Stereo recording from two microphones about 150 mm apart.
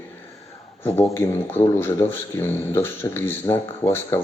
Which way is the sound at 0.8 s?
15° left (ahead or behind).